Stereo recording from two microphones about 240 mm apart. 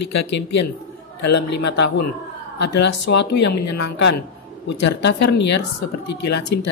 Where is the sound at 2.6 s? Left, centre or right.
Left.